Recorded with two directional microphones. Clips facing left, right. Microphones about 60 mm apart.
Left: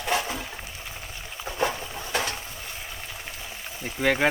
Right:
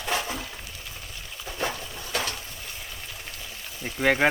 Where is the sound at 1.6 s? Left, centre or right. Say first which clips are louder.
Left 4 dB; centre.